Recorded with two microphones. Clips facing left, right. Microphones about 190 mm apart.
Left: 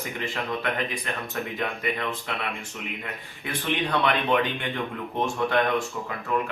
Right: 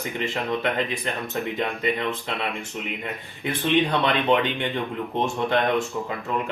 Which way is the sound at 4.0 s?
25° right (ahead or behind).